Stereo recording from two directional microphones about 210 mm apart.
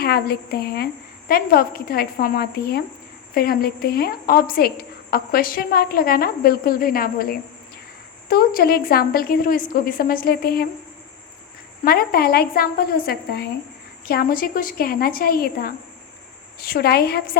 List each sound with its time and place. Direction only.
0.0 s a woman's voice: 50° left (ahead or behind)
11.9 s a woman's voice: 45° left (ahead or behind)